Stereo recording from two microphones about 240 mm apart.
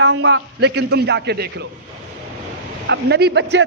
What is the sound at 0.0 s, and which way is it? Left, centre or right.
A man's voice, right.